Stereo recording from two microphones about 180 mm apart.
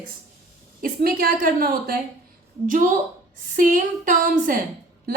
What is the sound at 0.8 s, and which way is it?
A woman's voice, 55° right (ahead or behind).